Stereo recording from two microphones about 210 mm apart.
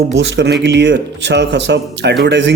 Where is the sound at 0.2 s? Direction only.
55° right (ahead or behind).